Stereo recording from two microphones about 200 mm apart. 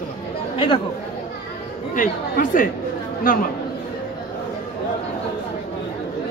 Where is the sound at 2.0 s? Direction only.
45° left (ahead or behind).